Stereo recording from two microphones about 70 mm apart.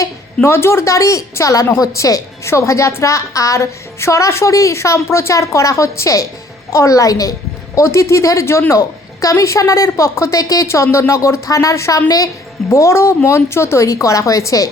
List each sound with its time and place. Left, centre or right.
0.4 s a woman's voice: left
7.8 s a woman's voice: left